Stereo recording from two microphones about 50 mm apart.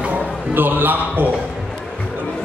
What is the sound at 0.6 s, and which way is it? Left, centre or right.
Speech, right.